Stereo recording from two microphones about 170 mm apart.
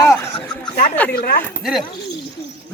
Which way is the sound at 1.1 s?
60° left (ahead or behind).